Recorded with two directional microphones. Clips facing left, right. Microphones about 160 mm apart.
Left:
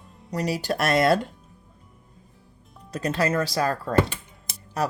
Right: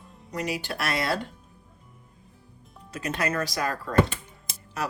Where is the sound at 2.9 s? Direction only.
35° left (ahead or behind).